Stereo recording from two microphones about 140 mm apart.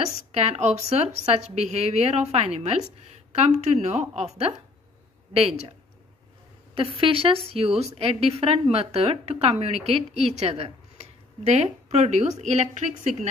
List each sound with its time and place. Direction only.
0.3 s a woman's voice: 50° right (ahead or behind)
6.7 s a woman's voice: 40° right (ahead or behind); by 13.3 s 55° right (ahead or behind)